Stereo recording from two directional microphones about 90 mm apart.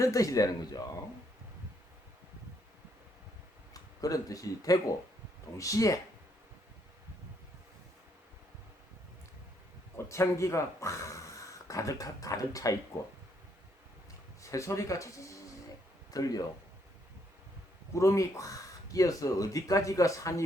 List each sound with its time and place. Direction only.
0.0 s speech: 40° left (ahead or behind)
4.0 s speech: 40° left (ahead or behind)
10.1 s speech: 35° left (ahead or behind)
14.4 s speech: 35° left (ahead or behind)
17.9 s speech: 35° left (ahead or behind)